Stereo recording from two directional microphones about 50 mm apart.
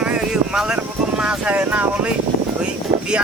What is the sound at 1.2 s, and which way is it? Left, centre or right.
Speech, right.